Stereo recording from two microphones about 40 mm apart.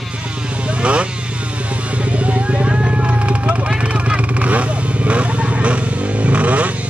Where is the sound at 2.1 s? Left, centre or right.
Right.